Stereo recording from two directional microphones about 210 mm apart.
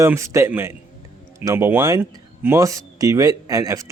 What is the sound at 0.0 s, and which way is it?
A man's voice, 15° right (ahead or behind).